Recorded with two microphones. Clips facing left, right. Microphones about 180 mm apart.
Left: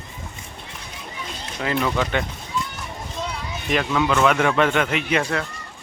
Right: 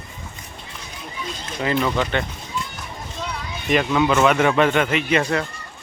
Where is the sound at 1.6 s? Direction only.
Centre (ahead or behind).